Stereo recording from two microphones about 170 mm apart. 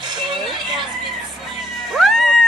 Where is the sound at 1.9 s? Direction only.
Centre (ahead or behind).